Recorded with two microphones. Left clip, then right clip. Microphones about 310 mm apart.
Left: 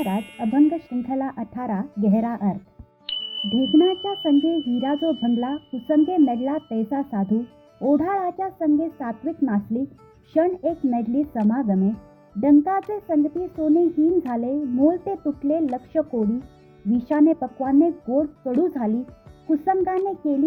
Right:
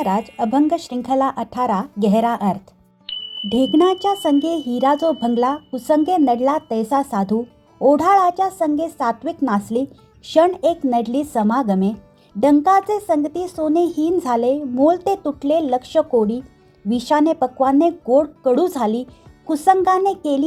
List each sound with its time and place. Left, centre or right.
0.3 s a woman's voice: right
3.1 s music: centre
3.5 s a woman's voice: right